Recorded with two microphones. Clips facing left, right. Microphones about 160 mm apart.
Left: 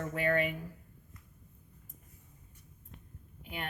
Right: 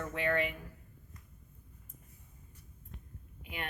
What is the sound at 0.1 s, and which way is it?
Speech, 45° left (ahead or behind).